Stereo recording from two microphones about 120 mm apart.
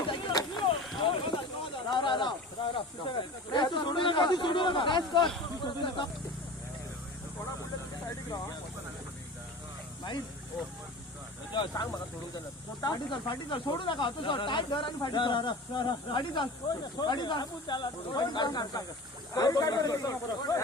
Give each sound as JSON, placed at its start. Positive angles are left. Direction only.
{"t": 0.1, "sound": "vehicle", "side_deg": 40}
{"t": 1.0, "sound": "a sound", "side_deg": 45}
{"t": 5.6, "sound": "speech", "side_deg": 45}
{"t": 11.7, "sound": "speech", "side_deg": 30}